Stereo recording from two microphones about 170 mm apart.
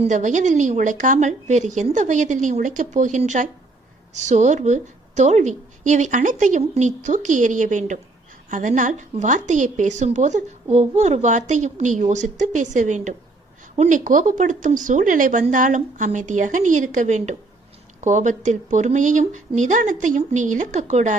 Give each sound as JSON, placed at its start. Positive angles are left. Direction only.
{"t": 0.0, "sound": "a woman's voice", "side_deg": -45}